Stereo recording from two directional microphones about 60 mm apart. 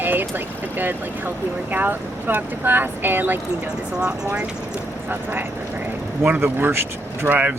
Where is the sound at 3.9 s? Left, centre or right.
Centre.